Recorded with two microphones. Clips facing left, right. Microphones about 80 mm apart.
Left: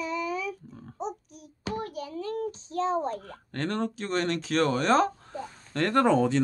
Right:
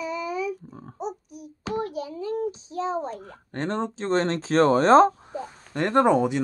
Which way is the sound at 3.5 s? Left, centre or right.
Right.